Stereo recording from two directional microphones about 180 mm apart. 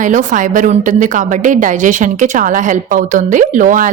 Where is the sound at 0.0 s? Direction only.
45° right (ahead or behind).